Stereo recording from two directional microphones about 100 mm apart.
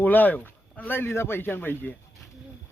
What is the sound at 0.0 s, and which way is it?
Speech, 15° left (ahead or behind).